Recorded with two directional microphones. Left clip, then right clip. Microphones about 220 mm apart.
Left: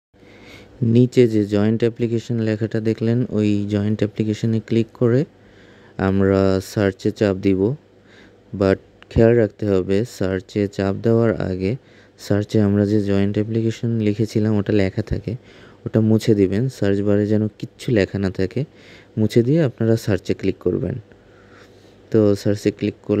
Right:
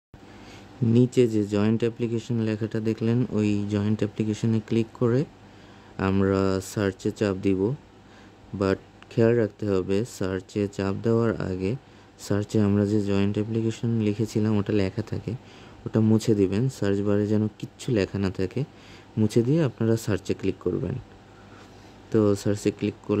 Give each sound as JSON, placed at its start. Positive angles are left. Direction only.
{"t": 0.5, "sound": "speech", "side_deg": 25}
{"t": 22.1, "sound": "speech", "side_deg": 20}